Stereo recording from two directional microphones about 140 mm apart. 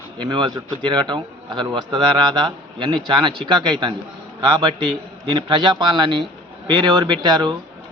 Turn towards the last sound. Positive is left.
turn(degrees=-30)  # may be behind; listen again after turning